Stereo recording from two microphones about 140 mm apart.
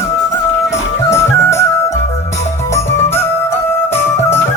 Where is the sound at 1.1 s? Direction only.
20° left (ahead or behind).